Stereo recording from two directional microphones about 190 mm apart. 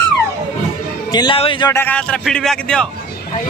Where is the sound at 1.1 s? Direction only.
25° left (ahead or behind).